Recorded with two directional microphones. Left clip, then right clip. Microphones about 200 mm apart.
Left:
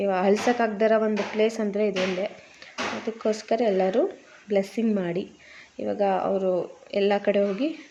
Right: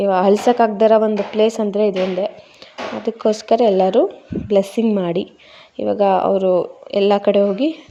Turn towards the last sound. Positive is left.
turn(degrees=-30)  # may be behind; listen again after turning